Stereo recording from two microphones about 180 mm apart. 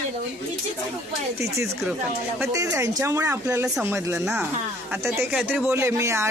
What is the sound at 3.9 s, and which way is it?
Speech, 15° right (ahead or behind).